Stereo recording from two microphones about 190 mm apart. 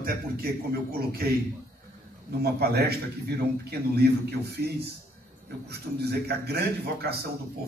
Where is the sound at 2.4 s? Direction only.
55° right (ahead or behind).